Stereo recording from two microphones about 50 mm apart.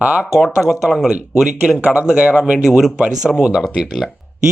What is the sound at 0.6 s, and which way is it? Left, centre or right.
Speech, centre.